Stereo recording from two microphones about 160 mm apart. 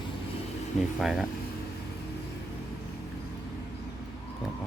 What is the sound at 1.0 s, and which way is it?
Speech, centre (ahead or behind).